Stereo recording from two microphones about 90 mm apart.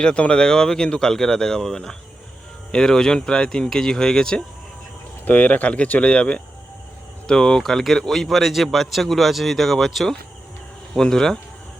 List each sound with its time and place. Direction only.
0.0 s a man's voice: 10° left (ahead or behind)